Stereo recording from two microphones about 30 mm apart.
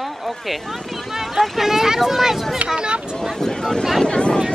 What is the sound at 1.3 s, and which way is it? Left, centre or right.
Speech, centre.